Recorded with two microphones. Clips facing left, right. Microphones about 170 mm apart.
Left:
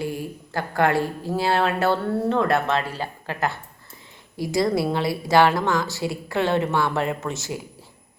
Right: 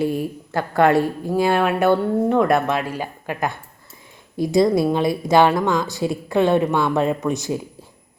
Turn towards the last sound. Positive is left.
turn(degrees=-20)  # may be behind; listen again after turning